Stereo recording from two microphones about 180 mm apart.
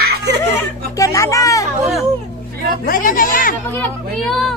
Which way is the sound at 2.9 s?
50° left (ahead or behind).